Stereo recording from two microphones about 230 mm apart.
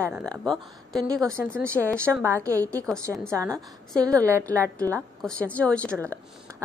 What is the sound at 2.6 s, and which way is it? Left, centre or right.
Speech, centre.